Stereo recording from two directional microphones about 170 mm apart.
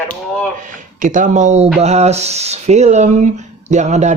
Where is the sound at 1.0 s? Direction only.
50° right (ahead or behind).